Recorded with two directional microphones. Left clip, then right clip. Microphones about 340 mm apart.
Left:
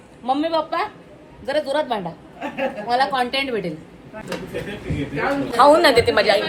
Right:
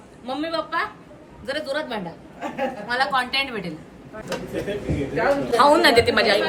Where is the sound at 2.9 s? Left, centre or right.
Centre.